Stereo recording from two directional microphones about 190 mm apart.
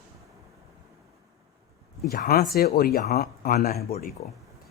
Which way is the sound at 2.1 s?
50° left (ahead or behind).